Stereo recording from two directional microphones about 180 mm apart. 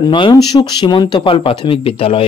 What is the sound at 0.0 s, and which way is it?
Speech, 25° left (ahead or behind).